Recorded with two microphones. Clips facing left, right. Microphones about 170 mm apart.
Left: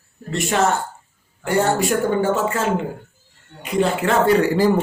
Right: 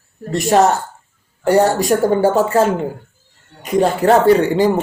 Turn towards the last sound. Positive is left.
turn(degrees=-25)  # may be behind; listen again after turning